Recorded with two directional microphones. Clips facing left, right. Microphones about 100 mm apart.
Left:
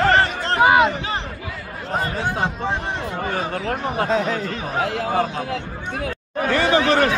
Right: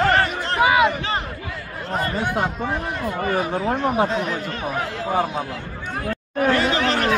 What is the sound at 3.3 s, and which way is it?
Speech, 10° right (ahead or behind).